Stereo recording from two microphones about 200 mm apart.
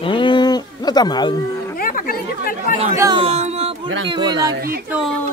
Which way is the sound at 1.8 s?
45° left (ahead or behind).